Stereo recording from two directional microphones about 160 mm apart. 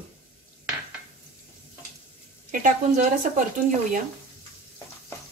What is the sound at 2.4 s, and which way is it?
A woman's voice, 55° right (ahead or behind).